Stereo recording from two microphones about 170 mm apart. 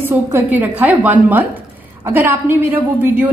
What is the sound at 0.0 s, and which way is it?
A woman's voice, 10° right (ahead or behind).